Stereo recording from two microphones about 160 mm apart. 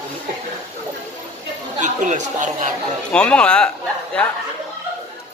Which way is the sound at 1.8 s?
50° right (ahead or behind).